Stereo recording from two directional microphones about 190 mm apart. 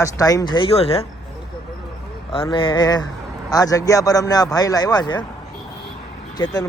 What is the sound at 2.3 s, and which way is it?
A man's voice, 25° left (ahead or behind).